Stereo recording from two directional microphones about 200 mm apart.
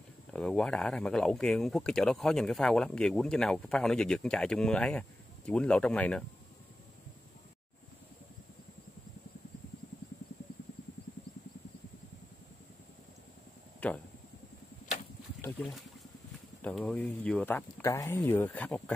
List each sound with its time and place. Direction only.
0.3 s speech: 5° left (ahead or behind)
13.7 s a sound: 5° left (ahead or behind)
16.6 s speech: 5° left (ahead or behind)